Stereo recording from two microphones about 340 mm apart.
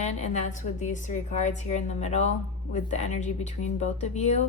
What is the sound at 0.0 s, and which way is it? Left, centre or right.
A woman's voice, centre.